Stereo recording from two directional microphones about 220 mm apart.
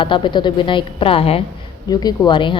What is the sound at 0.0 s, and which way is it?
A woman's voice, 20° left (ahead or behind).